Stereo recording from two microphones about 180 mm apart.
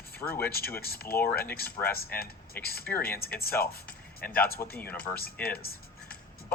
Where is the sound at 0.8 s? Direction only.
55° left (ahead or behind).